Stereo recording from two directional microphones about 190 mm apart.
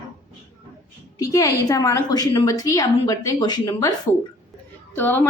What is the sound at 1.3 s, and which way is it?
A woman's voice, 15° left (ahead or behind).